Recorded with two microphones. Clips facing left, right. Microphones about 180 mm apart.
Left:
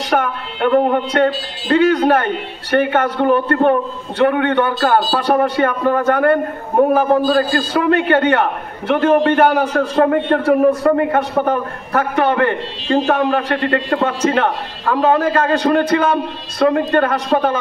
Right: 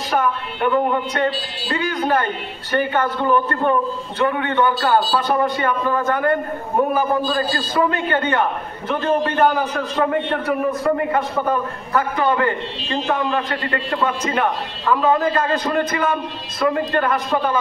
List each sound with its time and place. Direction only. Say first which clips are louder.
0.1 s a man's voice: left 2 dB; 65° left (ahead or behind)
9.8 s a man's voice: left 6 dB; 50° left (ahead or behind); by 16.8 s 70° left (ahead or behind)
17.3 s a man's voice: left 7 dB; 50° left (ahead or behind)